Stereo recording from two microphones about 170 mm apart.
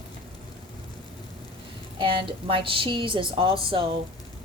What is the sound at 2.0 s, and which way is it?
A woman's voice, 30° right (ahead or behind).